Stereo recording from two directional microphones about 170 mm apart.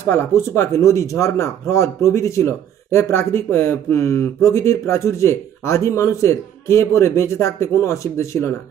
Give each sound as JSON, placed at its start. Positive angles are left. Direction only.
{"t": 0.1, "sound": "speech", "side_deg": 15}